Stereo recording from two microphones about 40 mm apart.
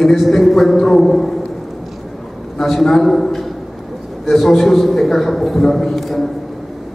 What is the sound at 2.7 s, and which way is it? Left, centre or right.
A man's voice, centre.